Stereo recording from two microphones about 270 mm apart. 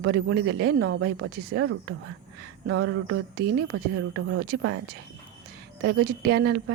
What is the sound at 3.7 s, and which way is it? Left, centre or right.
Speech, right.